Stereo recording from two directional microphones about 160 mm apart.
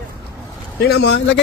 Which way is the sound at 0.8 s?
90° left.